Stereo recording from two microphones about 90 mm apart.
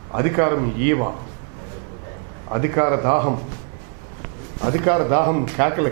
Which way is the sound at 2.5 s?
20° right (ahead or behind).